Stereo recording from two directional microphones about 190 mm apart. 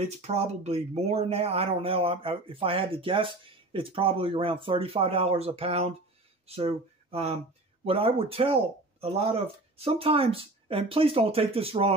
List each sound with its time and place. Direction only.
0.0 s speech: 35° right (ahead or behind)